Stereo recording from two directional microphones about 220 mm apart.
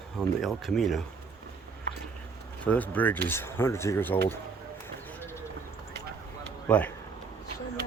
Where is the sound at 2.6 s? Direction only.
5° left (ahead or behind).